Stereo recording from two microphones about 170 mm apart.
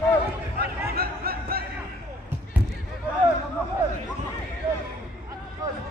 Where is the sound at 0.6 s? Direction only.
65° right (ahead or behind).